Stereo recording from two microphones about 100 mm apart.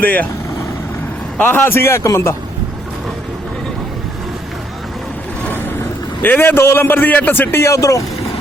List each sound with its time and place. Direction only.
0.0 s speech: 15° left (ahead or behind)
1.4 s a man's voice: 20° left (ahead or behind)
5.5 s vehicle: 20° left (ahead or behind)
6.2 s a man's voice: 20° left (ahead or behind)